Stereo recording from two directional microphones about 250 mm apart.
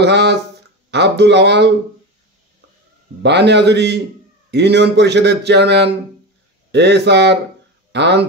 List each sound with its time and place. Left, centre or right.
0.0 s speech: right
3.2 s speech: right